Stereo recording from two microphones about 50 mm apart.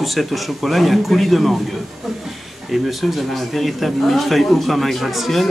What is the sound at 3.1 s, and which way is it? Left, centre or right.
Speech, centre.